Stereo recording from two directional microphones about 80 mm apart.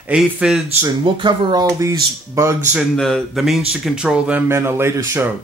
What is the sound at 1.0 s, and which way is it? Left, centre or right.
Speech, right.